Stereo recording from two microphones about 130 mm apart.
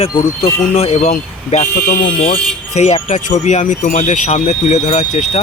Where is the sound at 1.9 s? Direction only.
90° left.